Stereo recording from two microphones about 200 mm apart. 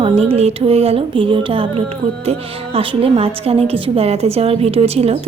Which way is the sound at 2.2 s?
30° right (ahead or behind).